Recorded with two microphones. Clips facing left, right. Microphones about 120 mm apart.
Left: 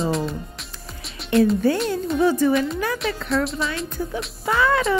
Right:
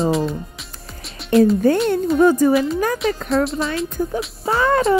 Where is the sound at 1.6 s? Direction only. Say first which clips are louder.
Right 5 dB; 45° right (ahead or behind).